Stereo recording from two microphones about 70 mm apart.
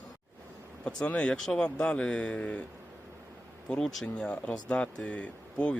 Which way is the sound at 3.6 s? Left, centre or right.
Centre.